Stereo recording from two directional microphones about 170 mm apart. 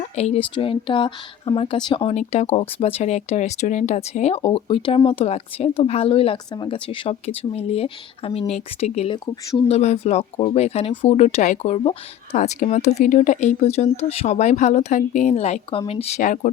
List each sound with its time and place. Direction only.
0.0 s speech: 40° left (ahead or behind)
9.6 s speech: 40° left (ahead or behind)
12.4 s speech: 50° left (ahead or behind)